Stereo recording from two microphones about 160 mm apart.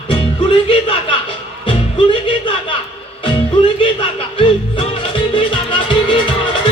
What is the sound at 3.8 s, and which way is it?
Music, 30° left (ahead or behind).